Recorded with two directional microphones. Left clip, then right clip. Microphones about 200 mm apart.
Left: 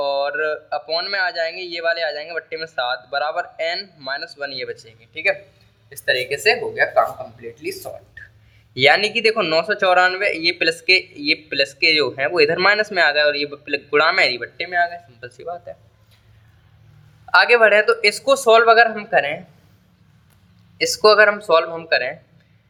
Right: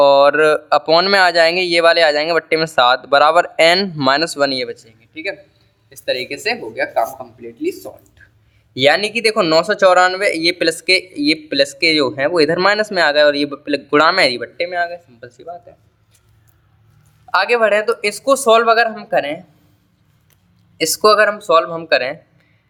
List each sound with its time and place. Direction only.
0.0 s speech: 35° right (ahead or behind); by 5.4 s 20° right (ahead or behind)
5.9 s speech: 30° right (ahead or behind)
15.3 s speech: 15° right (ahead or behind)
17.3 s speech: 15° right (ahead or behind)
20.7 s speech: 35° right (ahead or behind)